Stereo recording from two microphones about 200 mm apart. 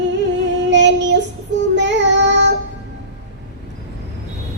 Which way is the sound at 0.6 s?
60° right (ahead or behind).